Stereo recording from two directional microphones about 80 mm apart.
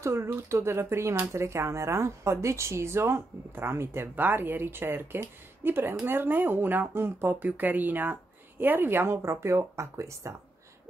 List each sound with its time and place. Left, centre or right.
0.0 s speech: right